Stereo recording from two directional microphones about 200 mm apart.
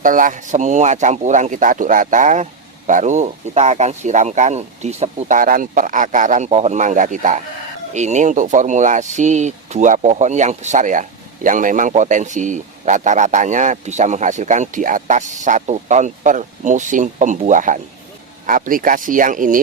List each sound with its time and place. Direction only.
0.0 s speech: 40° right (ahead or behind)